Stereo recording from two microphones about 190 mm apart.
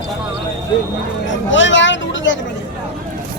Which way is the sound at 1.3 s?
80° left.